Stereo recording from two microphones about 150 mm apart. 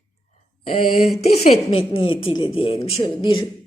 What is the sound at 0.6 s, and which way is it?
Speech, 45° left (ahead or behind).